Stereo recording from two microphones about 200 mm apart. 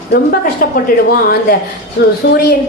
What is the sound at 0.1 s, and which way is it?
Speech, 50° left (ahead or behind).